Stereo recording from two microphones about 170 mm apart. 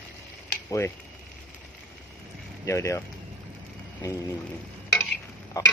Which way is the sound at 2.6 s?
15° left (ahead or behind).